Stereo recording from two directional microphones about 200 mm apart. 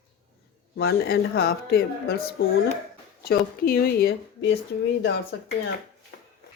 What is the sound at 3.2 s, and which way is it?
Speech, 50° left (ahead or behind).